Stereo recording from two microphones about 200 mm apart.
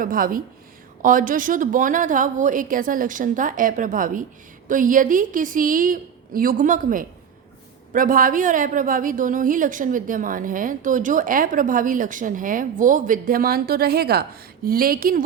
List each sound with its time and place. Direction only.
0.0 s a woman's voice: 45° right (ahead or behind)